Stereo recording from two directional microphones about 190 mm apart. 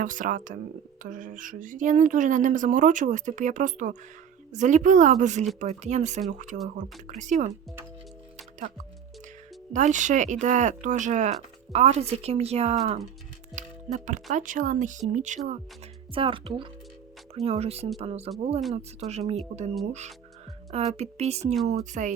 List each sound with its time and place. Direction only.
0.0 s a woman's voice: 45° right (ahead or behind)
9.7 s speech: 40° right (ahead or behind)
16.1 s speech: 30° right (ahead or behind)